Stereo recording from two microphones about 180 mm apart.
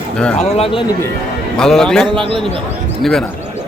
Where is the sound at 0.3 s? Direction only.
35° left (ahead or behind).